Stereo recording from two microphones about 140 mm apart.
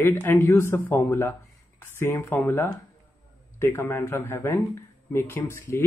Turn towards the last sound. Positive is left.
turn(degrees=15)  # may be behind; listen again after turning